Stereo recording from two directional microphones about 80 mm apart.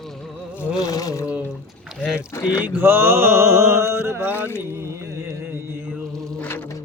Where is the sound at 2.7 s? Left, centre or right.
Right.